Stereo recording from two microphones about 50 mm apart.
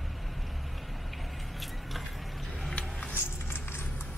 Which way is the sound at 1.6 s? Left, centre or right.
Centre.